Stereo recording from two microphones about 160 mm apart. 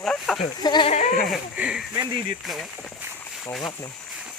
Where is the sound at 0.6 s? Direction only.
30° left (ahead or behind).